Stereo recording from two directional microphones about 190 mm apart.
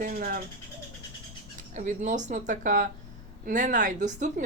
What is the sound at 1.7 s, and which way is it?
Speech, 40° right (ahead or behind).